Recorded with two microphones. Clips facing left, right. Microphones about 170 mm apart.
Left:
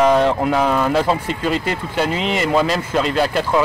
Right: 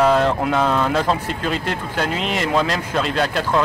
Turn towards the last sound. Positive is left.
turn(degrees=5)  # may be behind; listen again after turning